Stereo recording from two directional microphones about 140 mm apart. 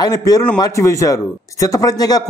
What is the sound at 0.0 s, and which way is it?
Speech, 25° left (ahead or behind).